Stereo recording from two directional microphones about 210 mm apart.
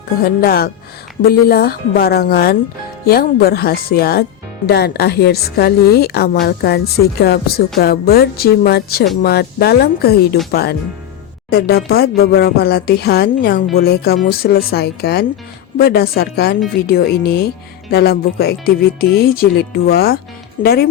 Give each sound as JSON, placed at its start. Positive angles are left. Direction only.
{"t": 0.3, "sound": "speech", "side_deg": 45}